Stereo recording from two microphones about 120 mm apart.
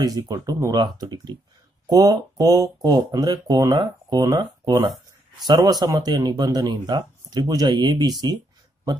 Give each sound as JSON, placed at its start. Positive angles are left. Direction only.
{"t": 0.0, "sound": "speech", "side_deg": -30}
{"t": 5.5, "sound": "speech", "side_deg": -35}